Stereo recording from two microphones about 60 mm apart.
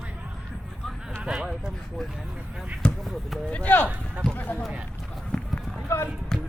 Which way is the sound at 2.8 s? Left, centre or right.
Centre.